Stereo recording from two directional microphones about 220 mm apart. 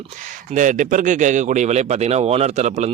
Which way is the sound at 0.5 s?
35° right (ahead or behind).